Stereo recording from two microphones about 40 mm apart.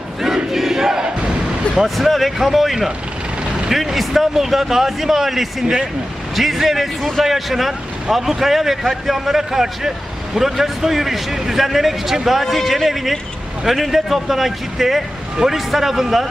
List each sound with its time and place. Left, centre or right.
0.5 s a man's voice: centre
2.0 s speech: centre
5.6 s speech: centre
6.3 s a man's voice: centre